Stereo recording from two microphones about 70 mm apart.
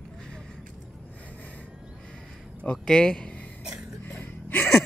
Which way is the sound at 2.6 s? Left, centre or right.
Centre.